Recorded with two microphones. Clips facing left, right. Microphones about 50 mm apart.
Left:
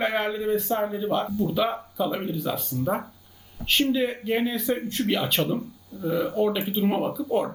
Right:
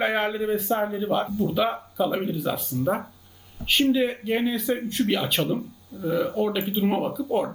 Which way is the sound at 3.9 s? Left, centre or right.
Centre.